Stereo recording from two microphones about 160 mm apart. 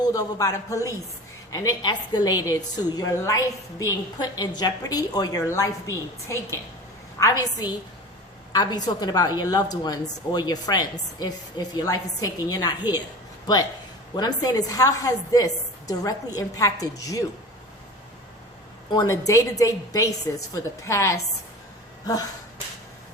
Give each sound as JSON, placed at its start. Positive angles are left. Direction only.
{"t": 0.0, "sound": "a woman's voice", "side_deg": 25}
{"t": 14.2, "sound": "a woman's voice", "side_deg": 25}
{"t": 18.9, "sound": "a woman's voice", "side_deg": 25}